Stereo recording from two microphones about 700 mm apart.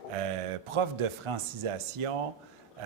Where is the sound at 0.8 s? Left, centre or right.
Right.